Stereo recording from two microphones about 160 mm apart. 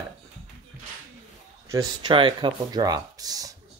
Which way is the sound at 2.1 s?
30° right (ahead or behind).